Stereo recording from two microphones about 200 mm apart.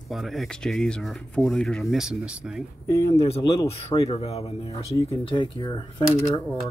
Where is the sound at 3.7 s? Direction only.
25° left (ahead or behind).